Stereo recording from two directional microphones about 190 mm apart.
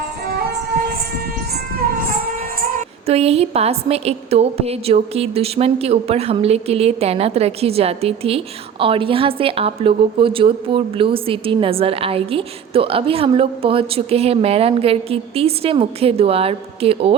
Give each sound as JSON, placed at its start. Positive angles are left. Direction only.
{"t": 2.3, "sound": "music", "side_deg": -45}
{"t": 3.1, "sound": "a woman's voice", "side_deg": -30}